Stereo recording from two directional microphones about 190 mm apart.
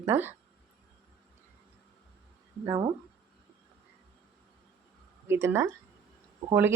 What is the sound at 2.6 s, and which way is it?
Speech, 15° right (ahead or behind).